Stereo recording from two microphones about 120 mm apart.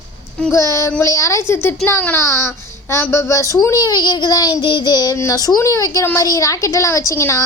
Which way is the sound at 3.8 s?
35° left (ahead or behind).